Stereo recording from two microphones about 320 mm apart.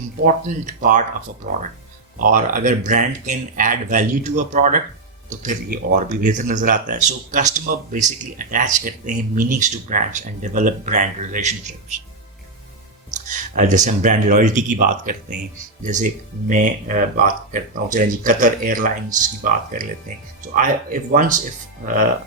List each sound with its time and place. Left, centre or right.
0.3 s speech: right
13.1 s speech: right